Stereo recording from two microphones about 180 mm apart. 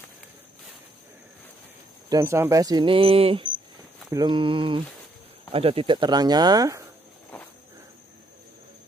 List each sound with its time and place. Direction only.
2.0 s speech: 15° right (ahead or behind)